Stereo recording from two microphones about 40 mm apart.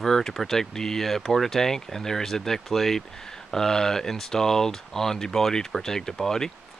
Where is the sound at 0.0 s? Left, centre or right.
Centre.